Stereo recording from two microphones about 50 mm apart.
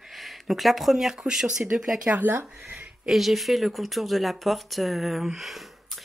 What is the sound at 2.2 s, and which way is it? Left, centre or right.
Speech, right.